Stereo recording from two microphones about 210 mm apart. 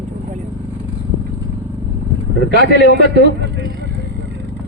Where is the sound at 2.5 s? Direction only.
55° left (ahead or behind).